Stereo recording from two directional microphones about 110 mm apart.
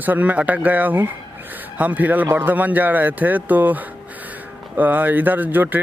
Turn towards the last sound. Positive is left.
turn(degrees=-15)  # may be behind; listen again after turning